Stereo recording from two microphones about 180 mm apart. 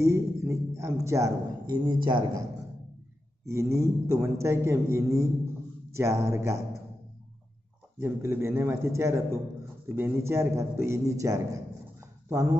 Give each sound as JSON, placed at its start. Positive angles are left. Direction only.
{"t": 0.0, "sound": "a man's voice", "side_deg": -15}
{"t": 3.4, "sound": "a man's voice", "side_deg": -15}
{"t": 8.0, "sound": "a man's voice", "side_deg": -15}